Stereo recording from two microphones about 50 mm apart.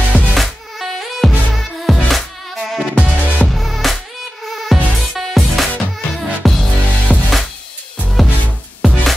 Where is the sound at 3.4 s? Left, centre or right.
Centre.